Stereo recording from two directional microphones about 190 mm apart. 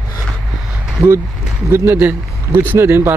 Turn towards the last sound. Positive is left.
turn(degrees=-10)  # may be behind; listen again after turning